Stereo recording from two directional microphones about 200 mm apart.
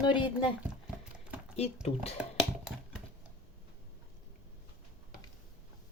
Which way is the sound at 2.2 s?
5° right (ahead or behind).